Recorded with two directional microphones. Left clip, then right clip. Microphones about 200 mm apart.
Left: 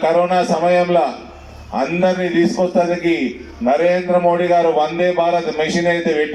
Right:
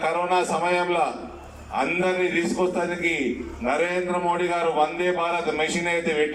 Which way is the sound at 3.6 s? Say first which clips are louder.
Left 9 dB; 30° left (ahead or behind).